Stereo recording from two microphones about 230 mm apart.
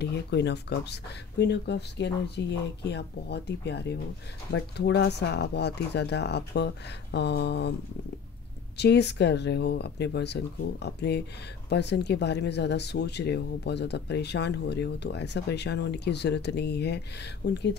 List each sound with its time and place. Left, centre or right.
0.0 s speech: left
8.7 s speech: left